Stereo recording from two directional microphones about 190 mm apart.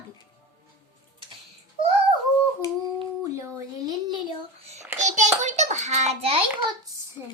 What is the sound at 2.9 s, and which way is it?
A child's voice, 15° right (ahead or behind).